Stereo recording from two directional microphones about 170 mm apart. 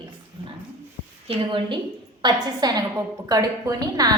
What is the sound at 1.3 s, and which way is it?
A woman's voice, 30° right (ahead or behind).